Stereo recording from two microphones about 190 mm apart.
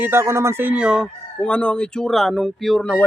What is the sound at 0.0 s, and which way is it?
Chicken, 15° right (ahead or behind).